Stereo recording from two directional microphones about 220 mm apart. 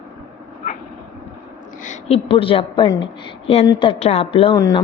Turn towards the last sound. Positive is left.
turn(degrees=15)  # may be behind; listen again after turning